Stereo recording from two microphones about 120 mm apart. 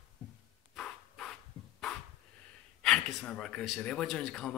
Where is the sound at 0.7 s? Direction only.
5° left (ahead or behind).